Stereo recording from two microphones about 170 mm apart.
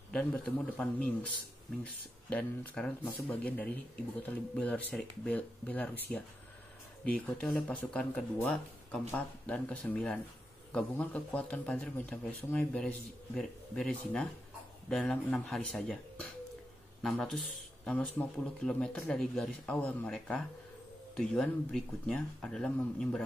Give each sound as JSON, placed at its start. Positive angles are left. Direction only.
{"t": 0.1, "sound": "speech", "side_deg": 5}
{"t": 2.2, "sound": "speech", "side_deg": 5}
{"t": 7.1, "sound": "speech", "side_deg": 5}